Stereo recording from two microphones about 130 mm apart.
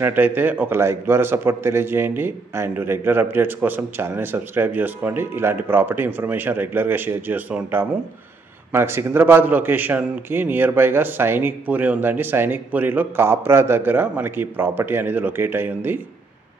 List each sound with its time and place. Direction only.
0.0 s a man's voice: 15° right (ahead or behind)